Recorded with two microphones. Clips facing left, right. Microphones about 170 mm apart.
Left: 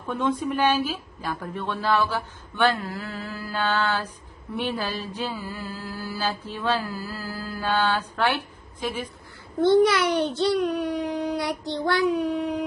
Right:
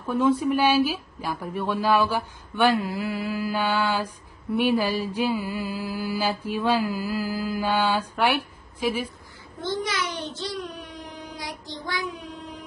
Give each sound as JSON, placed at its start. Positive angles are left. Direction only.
{"t": 0.0, "sound": "mantra", "side_deg": -10}
{"t": 9.6, "sound": "a child's voice", "side_deg": 65}